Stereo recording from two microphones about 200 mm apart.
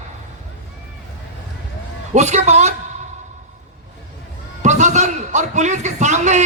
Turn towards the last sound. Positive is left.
turn(degrees=-35)  # may be behind; listen again after turning